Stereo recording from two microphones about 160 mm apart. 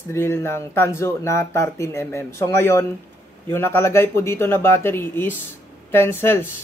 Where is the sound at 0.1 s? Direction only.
15° left (ahead or behind).